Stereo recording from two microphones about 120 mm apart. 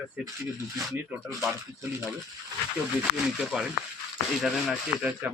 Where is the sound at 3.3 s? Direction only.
5° right (ahead or behind).